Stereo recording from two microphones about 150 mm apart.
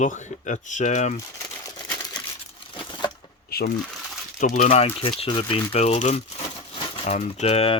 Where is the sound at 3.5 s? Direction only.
90° left.